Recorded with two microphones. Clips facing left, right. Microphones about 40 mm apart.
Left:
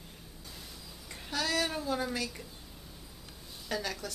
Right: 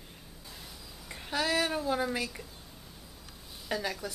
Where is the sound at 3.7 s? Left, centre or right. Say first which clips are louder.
Right 2 dB; centre.